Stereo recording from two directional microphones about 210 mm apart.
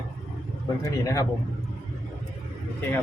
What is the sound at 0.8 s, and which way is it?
Speech, 15° left (ahead or behind).